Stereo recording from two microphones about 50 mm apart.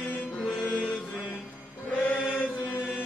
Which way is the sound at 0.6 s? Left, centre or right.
Left.